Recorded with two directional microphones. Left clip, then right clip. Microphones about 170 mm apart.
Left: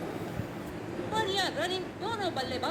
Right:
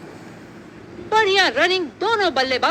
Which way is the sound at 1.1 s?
40° right (ahead or behind).